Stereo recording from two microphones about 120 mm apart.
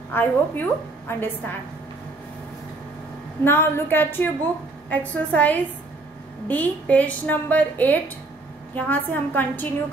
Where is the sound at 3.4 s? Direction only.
20° left (ahead or behind).